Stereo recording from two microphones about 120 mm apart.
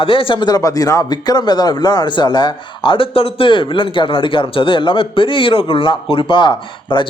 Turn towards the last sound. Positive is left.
turn(degrees=40)  # may be behind; listen again after turning